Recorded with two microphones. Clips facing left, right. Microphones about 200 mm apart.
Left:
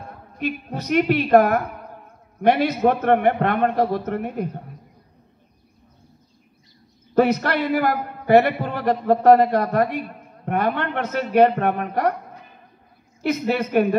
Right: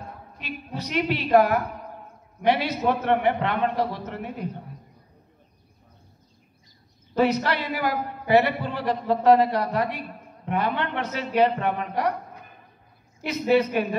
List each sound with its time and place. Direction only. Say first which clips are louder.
0.4 s a man's voice: left 7 dB; 50° left (ahead or behind)
7.2 s a man's voice: left 4 dB; 50° left (ahead or behind)
13.2 s a man's voice: right 1 dB; 50° left (ahead or behind)